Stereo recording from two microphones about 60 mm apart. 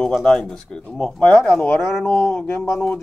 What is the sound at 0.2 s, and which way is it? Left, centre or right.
Speech, centre.